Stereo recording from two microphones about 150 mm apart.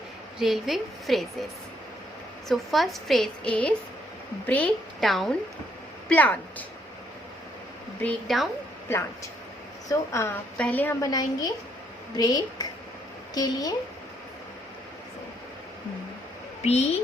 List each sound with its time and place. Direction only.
0.3 s a woman's voice: centre (ahead or behind)
2.5 s a woman's voice: centre (ahead or behind)
8.0 s a woman's voice: centre (ahead or behind)
8.9 s a woman's voice: 15° left (ahead or behind)
11.0 s a woman's voice: 25° left (ahead or behind)
16.6 s a child's voice: 45° left (ahead or behind)